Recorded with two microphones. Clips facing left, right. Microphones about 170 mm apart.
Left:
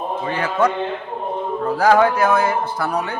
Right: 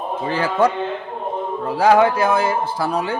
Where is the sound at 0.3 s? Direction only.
30° right (ahead or behind).